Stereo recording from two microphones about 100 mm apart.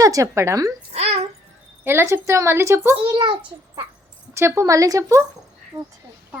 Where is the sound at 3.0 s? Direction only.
55° right (ahead or behind).